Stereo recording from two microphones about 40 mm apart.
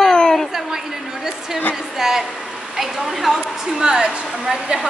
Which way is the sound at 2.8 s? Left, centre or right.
Centre.